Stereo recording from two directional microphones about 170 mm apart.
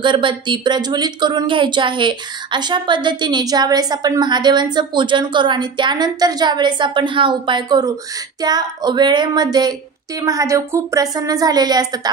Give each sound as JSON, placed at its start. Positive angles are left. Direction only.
{"t": 0.0, "sound": "speech", "side_deg": -30}